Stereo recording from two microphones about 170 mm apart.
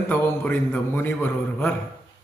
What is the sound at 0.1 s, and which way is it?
A man's voice, 10° left (ahead or behind).